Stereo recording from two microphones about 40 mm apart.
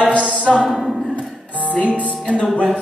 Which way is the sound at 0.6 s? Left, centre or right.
Centre.